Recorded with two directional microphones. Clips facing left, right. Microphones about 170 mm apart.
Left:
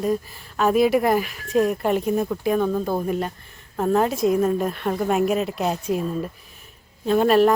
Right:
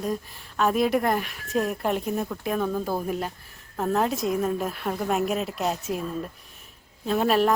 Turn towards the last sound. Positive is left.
turn(degrees=0)  # may be behind; listen again after turning